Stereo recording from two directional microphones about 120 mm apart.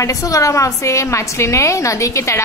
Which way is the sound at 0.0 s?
25° left (ahead or behind).